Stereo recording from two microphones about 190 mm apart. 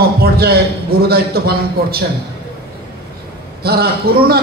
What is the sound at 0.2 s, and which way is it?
A man's voice, 55° right (ahead or behind).